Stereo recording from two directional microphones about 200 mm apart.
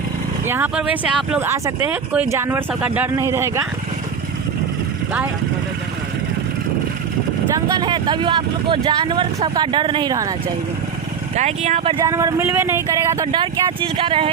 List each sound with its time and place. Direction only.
0.4 s speech: 10° right (ahead or behind)
7.5 s speech: 20° right (ahead or behind)
11.3 s speech: 35° right (ahead or behind)